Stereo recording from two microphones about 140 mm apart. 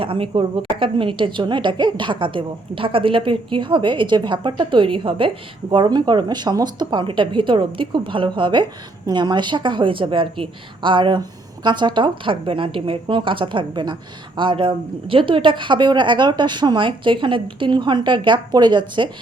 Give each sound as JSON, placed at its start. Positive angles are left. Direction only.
{"t": 0.0, "sound": "a woman's voice", "side_deg": -40}